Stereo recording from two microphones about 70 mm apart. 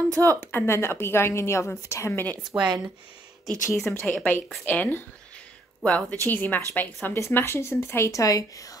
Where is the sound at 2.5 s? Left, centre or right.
Right.